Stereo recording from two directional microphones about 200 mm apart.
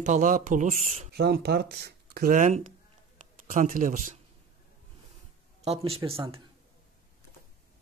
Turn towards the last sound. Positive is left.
turn(degrees=-25)  # may be behind; listen again after turning